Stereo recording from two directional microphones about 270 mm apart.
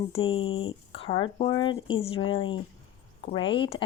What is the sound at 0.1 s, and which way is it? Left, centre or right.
Speech, centre.